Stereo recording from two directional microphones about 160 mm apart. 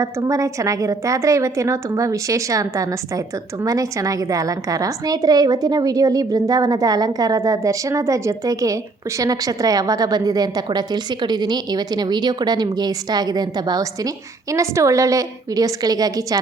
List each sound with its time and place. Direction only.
0.0 s a woman's voice: 20° right (ahead or behind)